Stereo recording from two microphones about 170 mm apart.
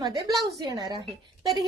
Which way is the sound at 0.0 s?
25° right (ahead or behind).